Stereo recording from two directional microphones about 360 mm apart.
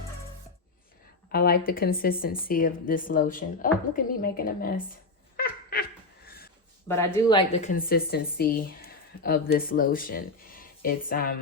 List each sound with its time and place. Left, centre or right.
1.3 s a woman's voice: left
5.4 s a sound: left
6.8 s a woman's voice: centre; by 11.3 s left